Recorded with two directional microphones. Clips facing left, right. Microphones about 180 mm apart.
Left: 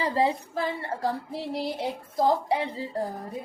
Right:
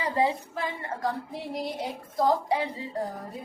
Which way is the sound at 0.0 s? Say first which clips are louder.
Left 1 dB; 30° left (ahead or behind).